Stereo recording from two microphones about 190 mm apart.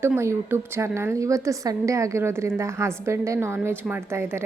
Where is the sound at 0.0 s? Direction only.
15° right (ahead or behind).